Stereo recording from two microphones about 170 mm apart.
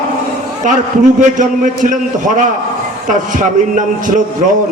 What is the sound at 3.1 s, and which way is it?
A man's voice, 50° right (ahead or behind).